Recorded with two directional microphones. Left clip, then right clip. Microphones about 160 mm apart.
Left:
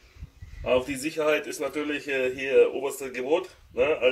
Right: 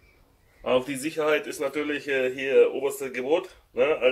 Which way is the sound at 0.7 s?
5° right (ahead or behind).